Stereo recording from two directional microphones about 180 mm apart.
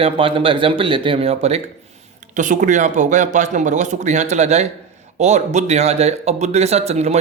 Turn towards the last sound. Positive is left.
turn(degrees=-35)  # may be behind; listen again after turning